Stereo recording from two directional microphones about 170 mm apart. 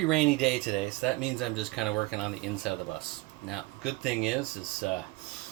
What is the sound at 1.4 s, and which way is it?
Speech, centre (ahead or behind).